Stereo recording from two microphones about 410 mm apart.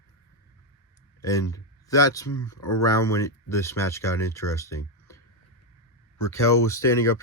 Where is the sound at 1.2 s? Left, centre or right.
Centre.